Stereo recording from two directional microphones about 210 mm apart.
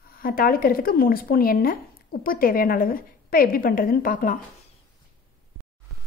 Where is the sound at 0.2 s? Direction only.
45° left (ahead or behind).